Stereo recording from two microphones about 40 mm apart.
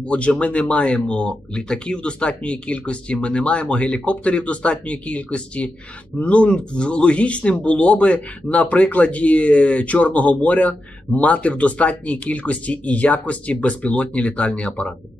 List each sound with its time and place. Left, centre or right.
0.1 s speech: left